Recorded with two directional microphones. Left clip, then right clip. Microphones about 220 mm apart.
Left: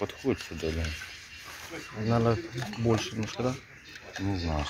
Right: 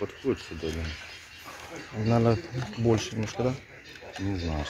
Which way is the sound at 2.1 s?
15° right (ahead or behind).